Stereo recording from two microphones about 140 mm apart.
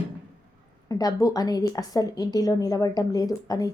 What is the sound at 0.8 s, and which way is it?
A woman's voice, 25° left (ahead or behind).